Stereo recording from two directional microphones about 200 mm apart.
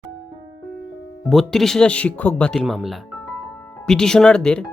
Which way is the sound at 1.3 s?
Centre (ahead or behind).